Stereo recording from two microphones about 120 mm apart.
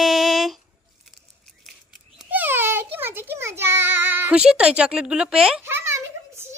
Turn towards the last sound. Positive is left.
turn(degrees=-20)  # may be behind; listen again after turning